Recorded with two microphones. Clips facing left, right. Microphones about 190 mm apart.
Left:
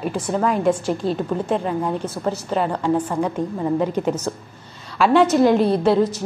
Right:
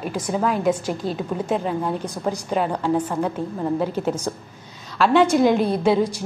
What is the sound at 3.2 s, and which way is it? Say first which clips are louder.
Speech: left 2 dB; 5° right (ahead or behind).